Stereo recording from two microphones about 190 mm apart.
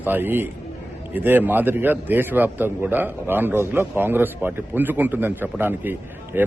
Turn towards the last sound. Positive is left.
turn(degrees=-10)  # may be behind; listen again after turning